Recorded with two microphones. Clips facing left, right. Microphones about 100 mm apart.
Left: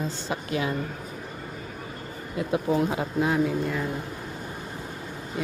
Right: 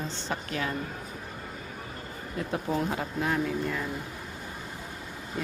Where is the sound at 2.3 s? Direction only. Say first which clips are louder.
Left 5 dB; 5° left (ahead or behind).